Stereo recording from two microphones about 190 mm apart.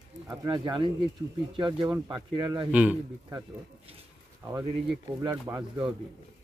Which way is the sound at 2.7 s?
5° right (ahead or behind).